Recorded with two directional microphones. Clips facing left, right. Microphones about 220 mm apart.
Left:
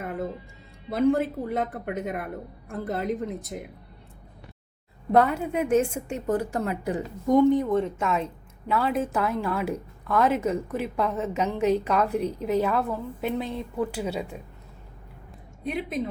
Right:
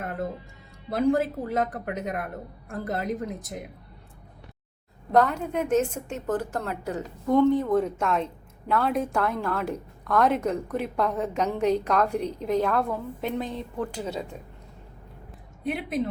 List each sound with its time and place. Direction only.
0.9 s a woman's voice: centre (ahead or behind)
5.1 s a woman's voice: 5° left (ahead or behind)
7.7 s a woman's voice: centre (ahead or behind)
15.6 s a woman's voice: centre (ahead or behind)